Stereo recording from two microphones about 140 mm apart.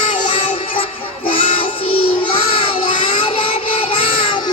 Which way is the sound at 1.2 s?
40° left (ahead or behind).